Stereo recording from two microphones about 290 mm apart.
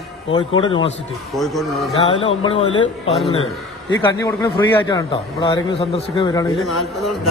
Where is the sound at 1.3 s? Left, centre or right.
Centre.